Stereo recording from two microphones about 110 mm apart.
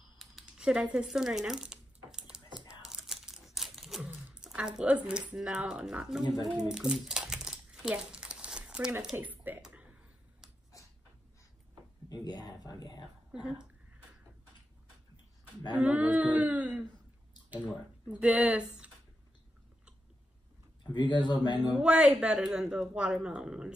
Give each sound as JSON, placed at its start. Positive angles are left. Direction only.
{"t": 0.2, "sound": "a sound", "side_deg": -5}
{"t": 6.7, "sound": "crumpling", "side_deg": -5}
{"t": 9.1, "sound": "a sound", "side_deg": -15}
{"t": 12.1, "sound": "speech", "side_deg": 40}
{"t": 13.3, "sound": "speech", "side_deg": -5}
{"t": 15.7, "sound": "speech", "side_deg": -10}
{"t": 20.8, "sound": "speech", "side_deg": 45}
{"t": 21.8, "sound": "speech", "side_deg": -10}